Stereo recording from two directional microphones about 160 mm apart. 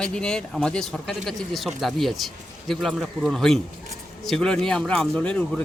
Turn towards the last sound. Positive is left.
turn(degrees=5)  # may be behind; listen again after turning